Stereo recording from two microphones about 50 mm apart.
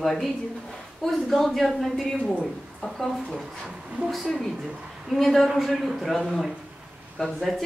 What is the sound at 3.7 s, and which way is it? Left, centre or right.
A woman's voice, centre.